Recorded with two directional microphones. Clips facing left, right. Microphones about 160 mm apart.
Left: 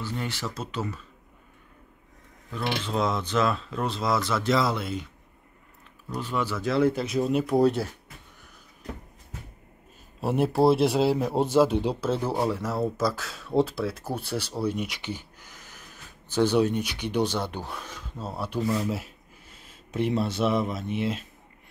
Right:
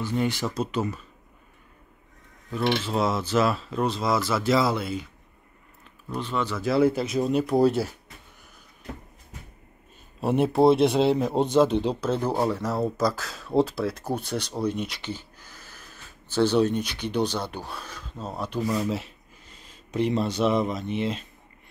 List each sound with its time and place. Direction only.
0.0 s speech: 15° right (ahead or behind)
2.8 s speech: 5° right (ahead or behind)
6.1 s speech: 10° left (ahead or behind)
6.6 s speech: 5° right (ahead or behind)
10.2 s speech: centre (ahead or behind)
14.6 s a sound: 10° left (ahead or behind)
17.4 s speech: 15° left (ahead or behind)
18.7 s speech: centre (ahead or behind)